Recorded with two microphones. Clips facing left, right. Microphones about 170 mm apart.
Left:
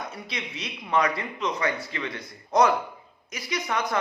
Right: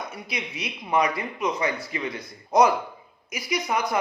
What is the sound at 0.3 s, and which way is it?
Speech, 10° right (ahead or behind).